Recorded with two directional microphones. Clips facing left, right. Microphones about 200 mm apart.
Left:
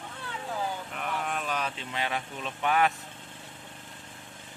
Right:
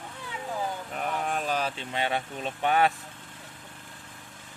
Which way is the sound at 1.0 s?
35° right (ahead or behind).